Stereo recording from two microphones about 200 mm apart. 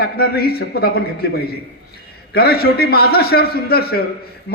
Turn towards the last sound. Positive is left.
turn(degrees=50)  # may be behind; listen again after turning